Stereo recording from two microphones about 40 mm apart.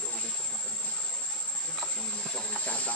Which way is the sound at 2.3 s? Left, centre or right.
Left.